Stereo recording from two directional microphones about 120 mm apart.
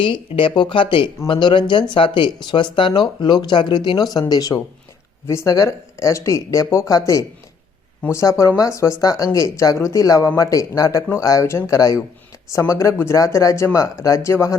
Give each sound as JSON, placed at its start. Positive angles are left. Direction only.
{"t": 0.0, "sound": "speech", "side_deg": 45}